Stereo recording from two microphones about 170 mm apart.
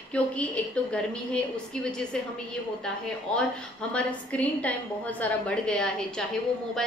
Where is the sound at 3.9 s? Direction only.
10° left (ahead or behind).